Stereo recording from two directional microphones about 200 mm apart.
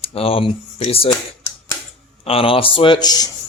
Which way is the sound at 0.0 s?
30° left (ahead or behind).